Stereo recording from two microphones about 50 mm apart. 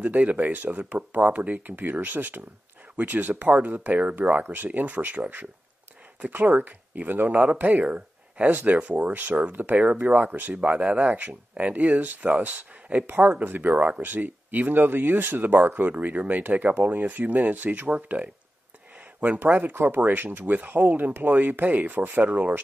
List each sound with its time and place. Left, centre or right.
0.0 s speech: right
1.7 s speech: right
8.5 s speech: right
13.7 s speech: right
14.0 s speech: right
19.4 s speech: right